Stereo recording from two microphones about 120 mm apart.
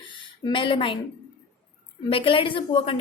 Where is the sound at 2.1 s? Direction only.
45° left (ahead or behind).